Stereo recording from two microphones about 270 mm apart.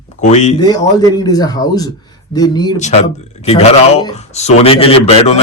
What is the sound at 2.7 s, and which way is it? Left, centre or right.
A man's voice, left.